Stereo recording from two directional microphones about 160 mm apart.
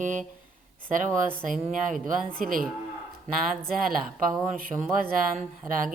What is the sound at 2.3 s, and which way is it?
Speech, 60° right (ahead or behind).